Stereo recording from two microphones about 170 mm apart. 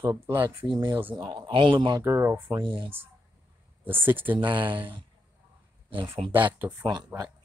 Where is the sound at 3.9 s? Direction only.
10° right (ahead or behind).